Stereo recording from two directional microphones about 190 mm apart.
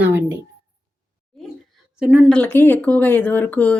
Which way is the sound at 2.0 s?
5° right (ahead or behind).